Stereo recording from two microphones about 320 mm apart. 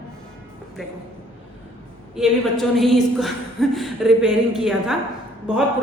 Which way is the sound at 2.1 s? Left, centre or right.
Centre.